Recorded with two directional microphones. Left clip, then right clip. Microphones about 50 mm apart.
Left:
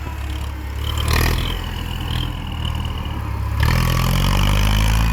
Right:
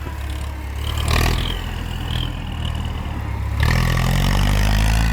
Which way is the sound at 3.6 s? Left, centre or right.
Left.